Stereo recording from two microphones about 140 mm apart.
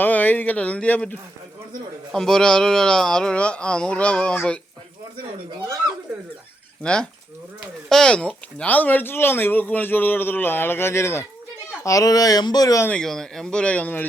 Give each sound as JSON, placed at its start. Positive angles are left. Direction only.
{"t": 0.0, "sound": "speech", "side_deg": 10}
{"t": 2.1, "sound": "speech", "side_deg": 5}
{"t": 6.8, "sound": "speech", "side_deg": 5}
{"t": 12.9, "sound": "speech", "side_deg": 5}